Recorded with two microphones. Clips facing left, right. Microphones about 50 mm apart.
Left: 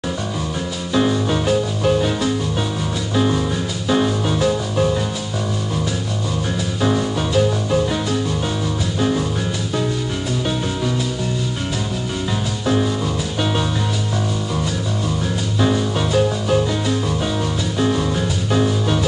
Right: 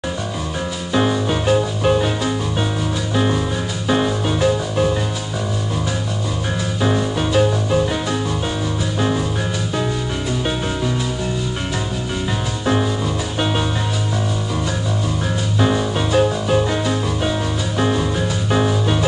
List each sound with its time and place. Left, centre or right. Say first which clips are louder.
0.9 s music: even; centre
3.9 s music: even; centre
6.8 s music: even; centre
13.4 s music: right 1 dB; centre
15.6 s music: even; centre